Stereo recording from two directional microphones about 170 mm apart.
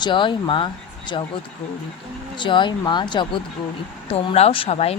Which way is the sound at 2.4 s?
30° left (ahead or behind).